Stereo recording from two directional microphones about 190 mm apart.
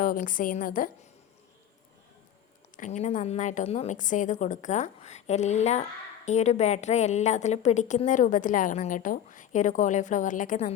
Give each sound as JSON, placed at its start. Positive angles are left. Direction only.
{"t": 0.0, "sound": "a woman's voice", "side_deg": 45}
{"t": 2.7, "sound": "a woman's voice", "side_deg": 40}